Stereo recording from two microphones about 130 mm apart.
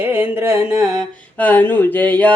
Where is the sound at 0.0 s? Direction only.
15° right (ahead or behind).